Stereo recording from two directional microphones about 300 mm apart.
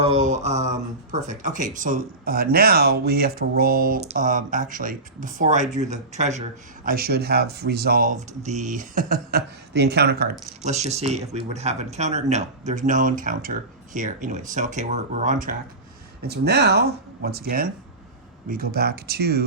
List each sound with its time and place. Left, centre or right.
0.0 s mantra: right
1.1 s speech: right